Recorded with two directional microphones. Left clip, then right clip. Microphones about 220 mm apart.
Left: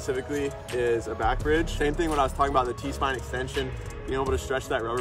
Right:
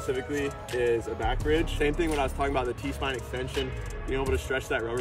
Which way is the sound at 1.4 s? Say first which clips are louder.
Left 2 dB; 45° left (ahead or behind).